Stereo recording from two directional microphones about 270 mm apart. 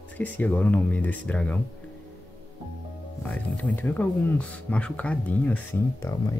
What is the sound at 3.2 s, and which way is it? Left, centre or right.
Speech, centre.